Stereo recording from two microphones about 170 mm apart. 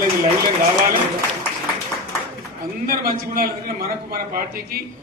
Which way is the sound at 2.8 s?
60° right (ahead or behind).